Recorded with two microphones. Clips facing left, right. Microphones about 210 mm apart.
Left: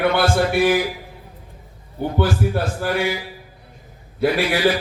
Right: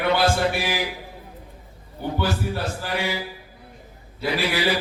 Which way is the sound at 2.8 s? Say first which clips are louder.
Left 8 dB; 50° left (ahead or behind).